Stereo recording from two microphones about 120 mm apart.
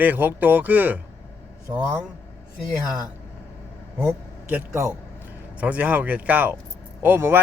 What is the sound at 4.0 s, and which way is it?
A man's voice, 15° right (ahead or behind).